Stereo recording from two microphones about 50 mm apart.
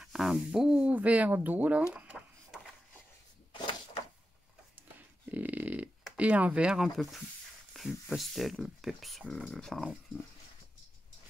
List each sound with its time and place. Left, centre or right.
0.0 s owl: centre
0.5 s speech: centre
0.8 s speech: right
2.1 s chicken: centre
4.7 s a sound: right
6.1 s speech: right
7.7 s speech: centre
9.5 s speech: centre